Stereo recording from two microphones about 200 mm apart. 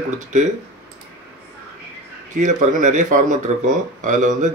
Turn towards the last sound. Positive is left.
turn(degrees=-40)  # may be behind; listen again after turning